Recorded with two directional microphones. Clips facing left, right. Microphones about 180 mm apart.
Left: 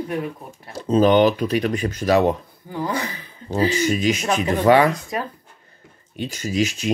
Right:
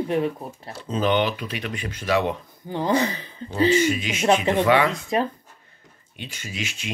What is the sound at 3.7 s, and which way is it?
Speech, 40° left (ahead or behind).